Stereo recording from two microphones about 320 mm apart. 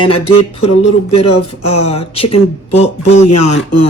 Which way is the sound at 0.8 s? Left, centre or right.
Centre.